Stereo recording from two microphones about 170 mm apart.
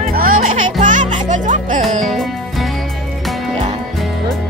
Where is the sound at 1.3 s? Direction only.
45° right (ahead or behind).